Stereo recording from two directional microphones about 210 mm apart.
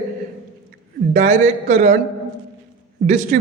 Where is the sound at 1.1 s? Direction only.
35° right (ahead or behind).